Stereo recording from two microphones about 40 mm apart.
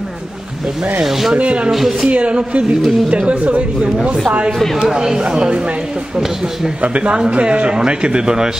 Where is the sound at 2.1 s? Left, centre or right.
Right.